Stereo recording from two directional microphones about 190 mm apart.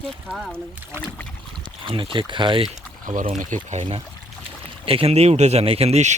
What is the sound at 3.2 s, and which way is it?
Speech, 40° right (ahead or behind).